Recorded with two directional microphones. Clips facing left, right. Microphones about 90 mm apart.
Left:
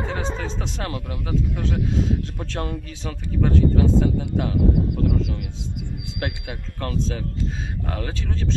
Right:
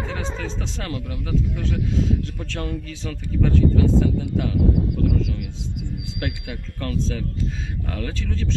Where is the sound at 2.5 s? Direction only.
30° left (ahead or behind).